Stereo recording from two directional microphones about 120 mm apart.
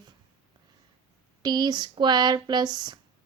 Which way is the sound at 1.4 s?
35° right (ahead or behind).